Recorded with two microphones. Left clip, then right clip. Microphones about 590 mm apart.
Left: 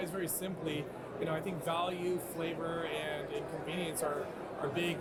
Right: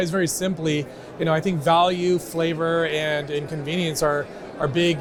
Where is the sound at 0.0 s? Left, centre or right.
Right.